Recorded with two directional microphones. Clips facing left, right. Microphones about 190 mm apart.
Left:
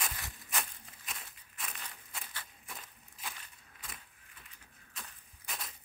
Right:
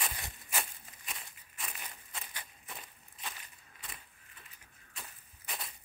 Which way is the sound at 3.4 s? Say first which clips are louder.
Even; centre (ahead or behind).